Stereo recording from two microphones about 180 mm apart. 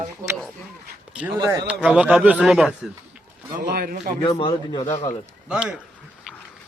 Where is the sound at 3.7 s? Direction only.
55° right (ahead or behind).